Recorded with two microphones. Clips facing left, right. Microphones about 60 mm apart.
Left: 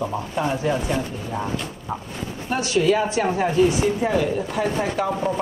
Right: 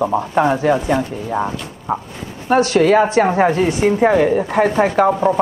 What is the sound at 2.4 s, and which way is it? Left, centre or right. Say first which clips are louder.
Speech: right 7 dB; right.